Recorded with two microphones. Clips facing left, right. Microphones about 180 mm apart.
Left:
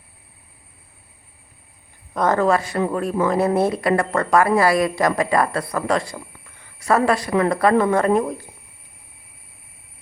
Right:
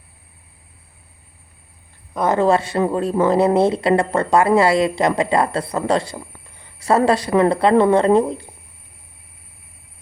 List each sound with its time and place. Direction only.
2.1 s a woman's voice: 10° right (ahead or behind)
2.4 s speech: 25° right (ahead or behind)